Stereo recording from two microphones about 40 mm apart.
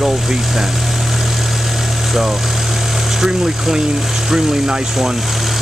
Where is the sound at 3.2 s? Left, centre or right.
Centre.